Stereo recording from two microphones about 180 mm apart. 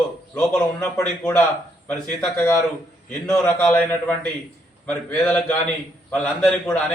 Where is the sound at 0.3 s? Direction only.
10° left (ahead or behind).